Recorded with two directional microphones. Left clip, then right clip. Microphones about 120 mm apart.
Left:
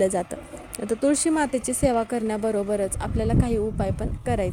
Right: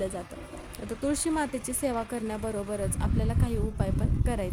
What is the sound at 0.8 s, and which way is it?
Speech, 35° left (ahead or behind).